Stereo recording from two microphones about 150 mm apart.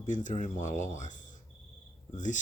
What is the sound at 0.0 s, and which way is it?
Speech, 55° left (ahead or behind).